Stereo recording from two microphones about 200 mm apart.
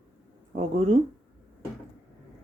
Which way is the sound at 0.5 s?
35° right (ahead or behind).